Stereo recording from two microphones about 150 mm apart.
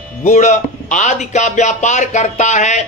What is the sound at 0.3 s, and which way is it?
Speech, 50° left (ahead or behind).